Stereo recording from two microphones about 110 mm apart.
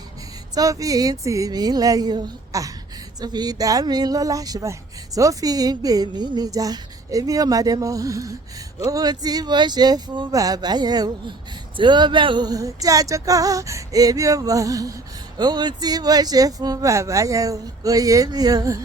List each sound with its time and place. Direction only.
0.5 s speech: 30° right (ahead or behind)